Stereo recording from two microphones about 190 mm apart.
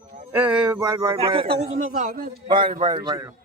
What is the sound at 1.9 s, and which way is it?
Speech, 45° right (ahead or behind).